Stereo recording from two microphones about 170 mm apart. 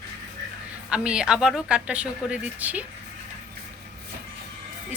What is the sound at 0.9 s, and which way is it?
A woman's voice, 5° right (ahead or behind).